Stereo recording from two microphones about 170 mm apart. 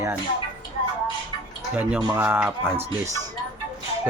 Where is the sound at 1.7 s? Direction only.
10° right (ahead or behind).